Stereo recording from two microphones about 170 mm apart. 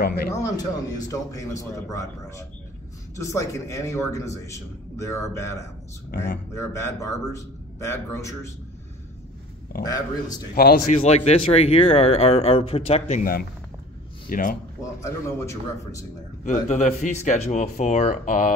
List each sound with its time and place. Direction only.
0.3 s a man's voice: 20° left (ahead or behind)
6.5 s a man's voice: 15° left (ahead or behind)
9.7 s a man's voice: 55° left (ahead or behind)
10.9 s speech: 40° left (ahead or behind)
13.2 s a man's voice: 60° left (ahead or behind)
15.0 s a man's voice: 15° left (ahead or behind)
16.4 s speech: 45° left (ahead or behind)